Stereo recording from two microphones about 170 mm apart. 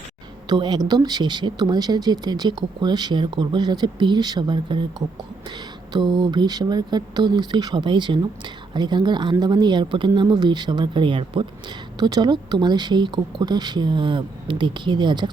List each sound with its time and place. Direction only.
0.4 s speech: 25° right (ahead or behind)